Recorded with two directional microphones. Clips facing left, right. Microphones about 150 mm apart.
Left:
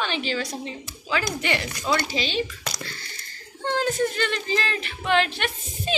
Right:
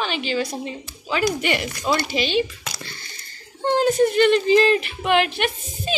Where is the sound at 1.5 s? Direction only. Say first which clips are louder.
Right 3 dB; 20° right (ahead or behind).